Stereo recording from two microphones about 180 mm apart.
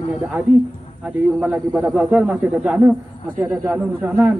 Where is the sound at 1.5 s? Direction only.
10° right (ahead or behind).